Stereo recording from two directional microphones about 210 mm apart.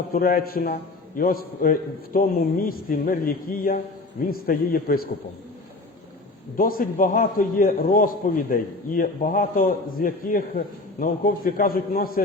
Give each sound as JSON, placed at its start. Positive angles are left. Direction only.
{"t": 0.1, "sound": "a man's voice", "side_deg": 45}
{"t": 6.6, "sound": "a man's voice", "side_deg": 45}